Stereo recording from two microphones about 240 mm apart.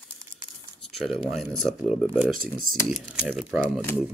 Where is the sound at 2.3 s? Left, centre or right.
Right.